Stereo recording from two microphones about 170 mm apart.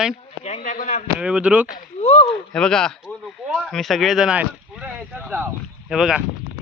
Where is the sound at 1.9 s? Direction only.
35° left (ahead or behind).